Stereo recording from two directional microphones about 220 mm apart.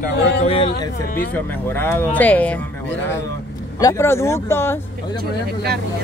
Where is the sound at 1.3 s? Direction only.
10° left (ahead or behind).